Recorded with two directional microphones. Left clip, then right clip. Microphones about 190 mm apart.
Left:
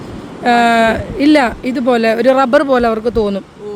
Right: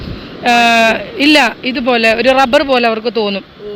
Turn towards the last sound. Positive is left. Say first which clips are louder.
# even
turn(degrees=25)  # may be behind; listen again after turning